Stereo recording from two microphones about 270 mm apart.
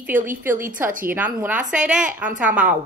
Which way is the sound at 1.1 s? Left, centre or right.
Centre.